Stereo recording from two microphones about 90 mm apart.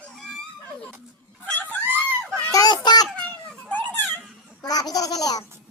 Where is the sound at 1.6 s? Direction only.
20° right (ahead or behind).